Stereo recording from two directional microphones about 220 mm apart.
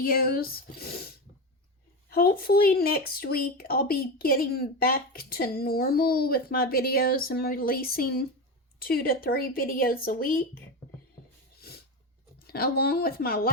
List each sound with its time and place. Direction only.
0.0 s speech: 40° left (ahead or behind)
11.6 s a sound: 45° left (ahead or behind)
12.5 s speech: 45° left (ahead or behind)